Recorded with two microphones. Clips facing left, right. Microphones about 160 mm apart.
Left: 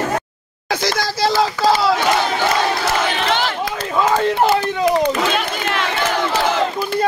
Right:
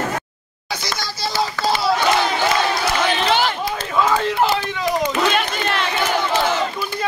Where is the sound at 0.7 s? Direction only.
90° left.